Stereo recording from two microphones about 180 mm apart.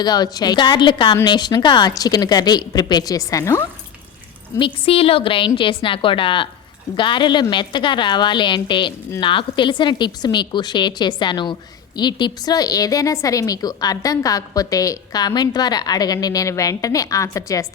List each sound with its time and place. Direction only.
0.0 s a woman's voice: 20° left (ahead or behind)
4.5 s a woman's voice: 30° left (ahead or behind)